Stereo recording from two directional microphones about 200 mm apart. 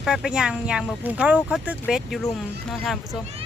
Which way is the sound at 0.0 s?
Centre (ahead or behind).